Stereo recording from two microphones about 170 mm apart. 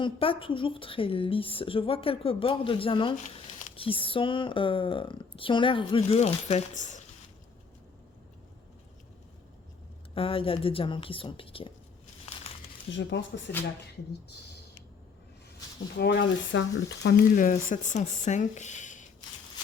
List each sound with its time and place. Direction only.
0.0 s speech: 30° left (ahead or behind)
10.2 s speech: 30° left (ahead or behind)
12.9 s speech: 90° left
16.0 s speech: 85° left
17.3 s speech: 50° left (ahead or behind)